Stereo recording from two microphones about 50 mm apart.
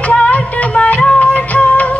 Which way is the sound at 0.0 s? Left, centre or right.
Left.